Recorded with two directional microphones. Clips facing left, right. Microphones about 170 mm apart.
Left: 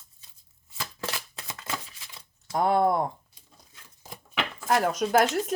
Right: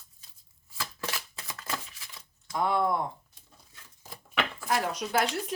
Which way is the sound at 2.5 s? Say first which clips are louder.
Left 4 dB; 45° left (ahead or behind).